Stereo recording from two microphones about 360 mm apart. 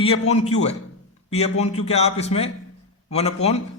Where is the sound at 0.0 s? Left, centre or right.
Centre.